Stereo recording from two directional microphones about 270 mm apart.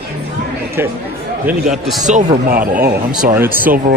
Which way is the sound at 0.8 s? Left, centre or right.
Centre.